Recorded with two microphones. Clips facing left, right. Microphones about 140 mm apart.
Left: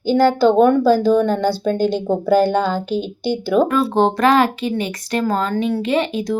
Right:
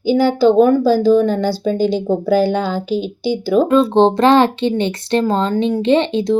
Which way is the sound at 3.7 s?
25° right (ahead or behind).